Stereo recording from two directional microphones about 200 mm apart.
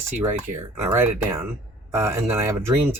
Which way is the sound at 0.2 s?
10° right (ahead or behind).